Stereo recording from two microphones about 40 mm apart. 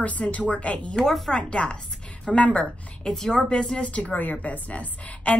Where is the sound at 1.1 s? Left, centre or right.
Centre.